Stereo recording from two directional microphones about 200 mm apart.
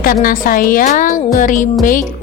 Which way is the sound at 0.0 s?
45° left (ahead or behind).